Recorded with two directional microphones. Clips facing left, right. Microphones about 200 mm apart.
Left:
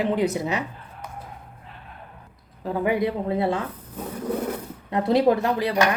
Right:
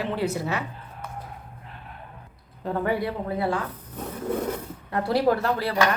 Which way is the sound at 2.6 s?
10° left (ahead or behind).